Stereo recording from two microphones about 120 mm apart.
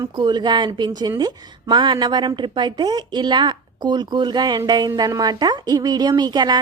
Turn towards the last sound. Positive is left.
turn(degrees=-35)  # may be behind; listen again after turning